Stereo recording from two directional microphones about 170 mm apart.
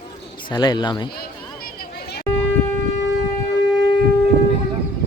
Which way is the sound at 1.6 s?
60° left (ahead or behind).